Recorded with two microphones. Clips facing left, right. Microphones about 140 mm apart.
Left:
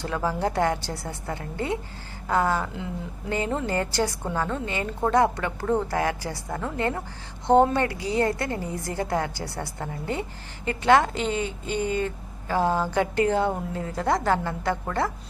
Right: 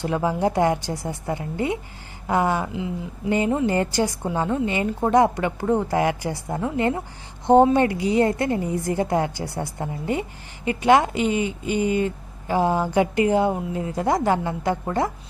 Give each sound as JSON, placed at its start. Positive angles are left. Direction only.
{"t": 0.0, "sound": "speech", "side_deg": -15}